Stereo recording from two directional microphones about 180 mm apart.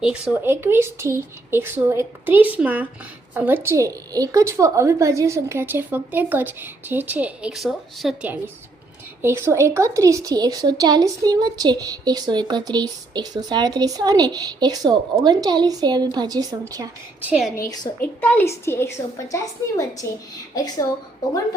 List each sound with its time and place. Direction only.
0.0 s a woman's voice: 5° right (ahead or behind); by 16.9 s 20° right (ahead or behind)
17.2 s a woman's voice: 5° right (ahead or behind)
17.6 s a woman's voice: 20° left (ahead or behind)
18.0 s a woman's voice: 10° left (ahead or behind)